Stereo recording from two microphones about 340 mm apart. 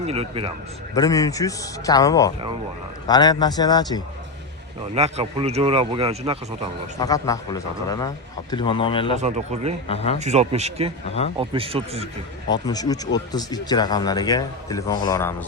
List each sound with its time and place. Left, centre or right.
0.0 s speech: centre
0.9 s speech: centre
4.9 s speech: centre
7.0 s speech: centre
9.1 s speech: centre
9.9 s speech: centre
10.2 s speech: centre
12.5 s speech: centre